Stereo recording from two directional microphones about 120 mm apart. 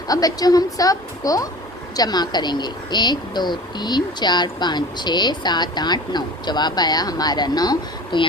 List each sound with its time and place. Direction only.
0.1 s speech: 30° left (ahead or behind)